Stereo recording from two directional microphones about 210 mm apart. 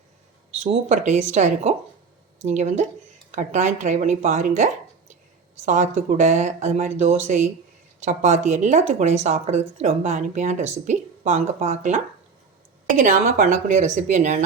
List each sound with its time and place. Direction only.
0.6 s speech: 30° right (ahead or behind)